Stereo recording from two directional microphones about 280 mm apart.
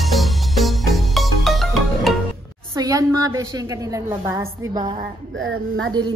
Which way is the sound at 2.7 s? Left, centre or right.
Centre.